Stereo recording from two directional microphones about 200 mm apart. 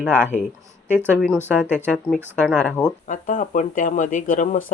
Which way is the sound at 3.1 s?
40° left (ahead or behind).